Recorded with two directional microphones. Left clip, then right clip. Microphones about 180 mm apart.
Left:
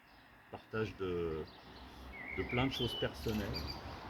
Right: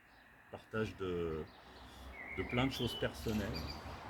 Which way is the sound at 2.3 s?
Centre (ahead or behind).